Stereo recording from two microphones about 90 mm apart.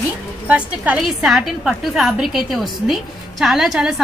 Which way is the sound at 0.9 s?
5° right (ahead or behind).